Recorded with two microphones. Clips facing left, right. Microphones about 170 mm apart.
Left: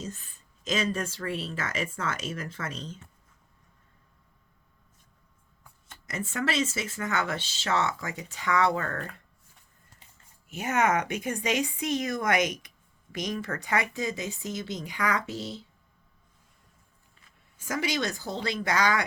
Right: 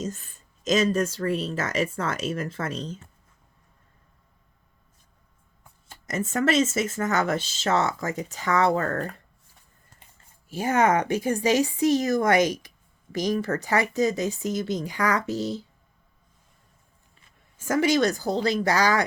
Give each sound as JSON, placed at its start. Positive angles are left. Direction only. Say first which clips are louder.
{"t": 0.0, "sound": "speech", "louder": "right 6 dB", "side_deg": -45}
{"t": 5.9, "sound": "speech", "louder": "right 7 dB", "side_deg": -45}
{"t": 10.5, "sound": "speech", "louder": "right 4 dB", "side_deg": -30}
{"t": 17.6, "sound": "speech", "louder": "right 9 dB", "side_deg": -50}